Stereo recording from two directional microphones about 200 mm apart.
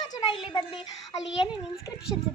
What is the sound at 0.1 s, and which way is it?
Speech, 25° left (ahead or behind).